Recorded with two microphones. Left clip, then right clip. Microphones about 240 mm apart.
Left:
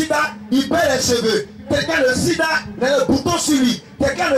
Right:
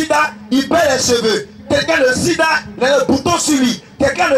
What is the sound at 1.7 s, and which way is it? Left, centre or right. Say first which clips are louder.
Speech: right 5 dB; centre.